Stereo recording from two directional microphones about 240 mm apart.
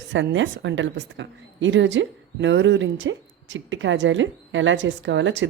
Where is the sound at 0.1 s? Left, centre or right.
Right.